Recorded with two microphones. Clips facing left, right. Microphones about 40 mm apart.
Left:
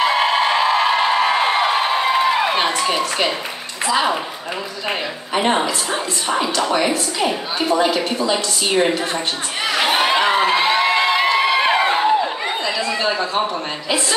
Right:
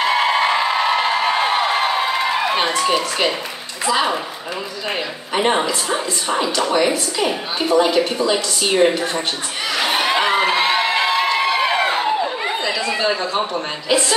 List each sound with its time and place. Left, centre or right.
0.1 s a sound: centre
3.8 s a woman's voice: centre
5.3 s a woman's voice: centre
7.6 s a man's voice: centre
7.9 s a woman's voice: centre
9.7 s crowd: centre
11.2 s a sound: centre
12.4 s chatter: centre